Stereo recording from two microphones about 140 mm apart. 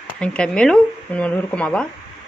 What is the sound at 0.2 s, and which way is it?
Speech, 5° left (ahead or behind).